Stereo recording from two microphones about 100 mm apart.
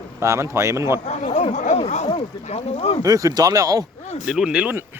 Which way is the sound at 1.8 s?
85° left.